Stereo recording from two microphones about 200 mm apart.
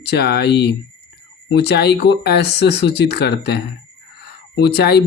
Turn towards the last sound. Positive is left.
turn(degrees=55)  # may be behind; listen again after turning